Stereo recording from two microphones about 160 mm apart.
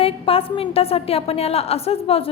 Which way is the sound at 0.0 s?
35° left (ahead or behind).